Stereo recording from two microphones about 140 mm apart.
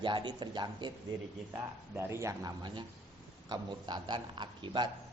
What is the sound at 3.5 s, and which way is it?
Speech, 30° right (ahead or behind).